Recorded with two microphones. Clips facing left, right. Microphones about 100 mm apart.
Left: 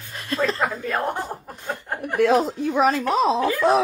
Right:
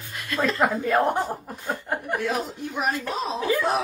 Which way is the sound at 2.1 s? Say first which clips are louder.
Left 11 dB; 90° left.